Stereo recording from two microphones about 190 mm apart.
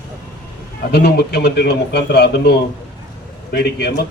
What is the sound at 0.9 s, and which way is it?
Speech, 60° left (ahead or behind).